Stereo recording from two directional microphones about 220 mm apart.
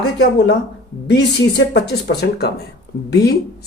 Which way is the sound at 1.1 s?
50° left (ahead or behind).